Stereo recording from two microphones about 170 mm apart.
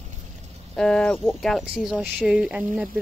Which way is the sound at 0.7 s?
5° left (ahead or behind).